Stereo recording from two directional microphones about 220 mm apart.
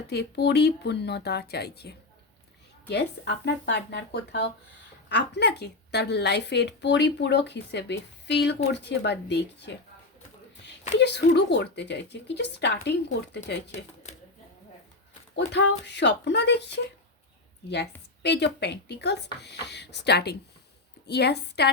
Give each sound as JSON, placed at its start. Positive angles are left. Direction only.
{"t": 0.1, "sound": "a woman's voice", "side_deg": 50}
{"t": 10.9, "sound": "a woman's voice", "side_deg": 50}
{"t": 13.7, "sound": "speech", "side_deg": 30}
{"t": 15.4, "sound": "a woman's voice", "side_deg": 50}
{"t": 18.2, "sound": "a woman's voice", "side_deg": 50}